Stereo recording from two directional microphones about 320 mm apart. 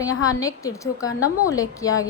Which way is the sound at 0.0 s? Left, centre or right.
Centre.